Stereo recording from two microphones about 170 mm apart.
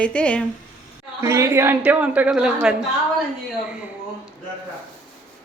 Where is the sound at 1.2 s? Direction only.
15° right (ahead or behind).